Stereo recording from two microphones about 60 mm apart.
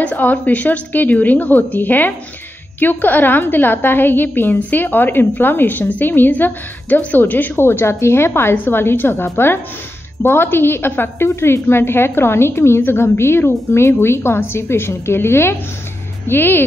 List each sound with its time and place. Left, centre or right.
0.0 s a woman's voice: left
9.1 s a woman's voice: left
11.2 s a woman's voice: left